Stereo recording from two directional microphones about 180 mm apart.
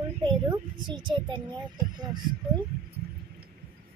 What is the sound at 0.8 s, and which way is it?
Speech, 25° right (ahead or behind).